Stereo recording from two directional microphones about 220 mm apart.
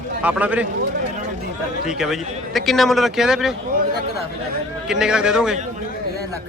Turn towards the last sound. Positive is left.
turn(degrees=-5)  # may be behind; listen again after turning